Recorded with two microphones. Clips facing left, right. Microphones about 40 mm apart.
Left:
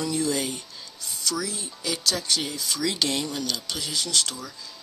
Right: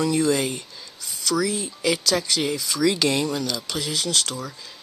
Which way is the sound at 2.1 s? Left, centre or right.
Right.